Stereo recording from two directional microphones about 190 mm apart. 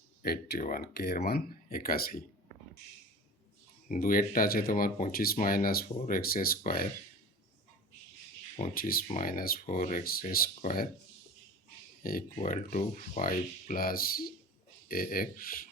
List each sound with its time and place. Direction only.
0.2 s speech: 55° left (ahead or behind)
3.8 s speech: 45° left (ahead or behind)
8.7 s speech: 50° left (ahead or behind)
12.0 s speech: 45° left (ahead or behind)